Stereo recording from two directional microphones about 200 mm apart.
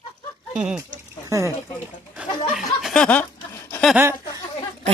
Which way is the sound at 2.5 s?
Centre (ahead or behind).